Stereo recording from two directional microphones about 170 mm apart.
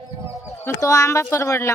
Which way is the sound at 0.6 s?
20° left (ahead or behind).